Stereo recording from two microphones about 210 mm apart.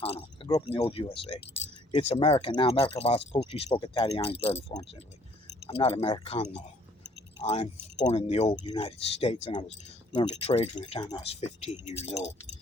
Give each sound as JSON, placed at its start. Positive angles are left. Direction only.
{"t": 0.0, "sound": "speech", "side_deg": 25}